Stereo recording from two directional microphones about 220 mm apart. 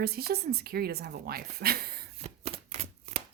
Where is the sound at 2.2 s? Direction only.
30° right (ahead or behind).